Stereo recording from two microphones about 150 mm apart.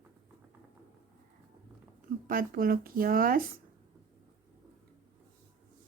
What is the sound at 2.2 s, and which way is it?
Speech, 70° right (ahead or behind).